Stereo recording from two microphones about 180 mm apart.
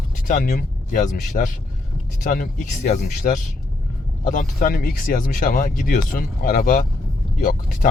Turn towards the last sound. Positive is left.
turn(degrees=50)  # may be behind; listen again after turning